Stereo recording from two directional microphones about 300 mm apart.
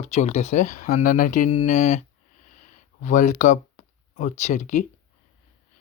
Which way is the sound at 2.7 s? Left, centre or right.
Left.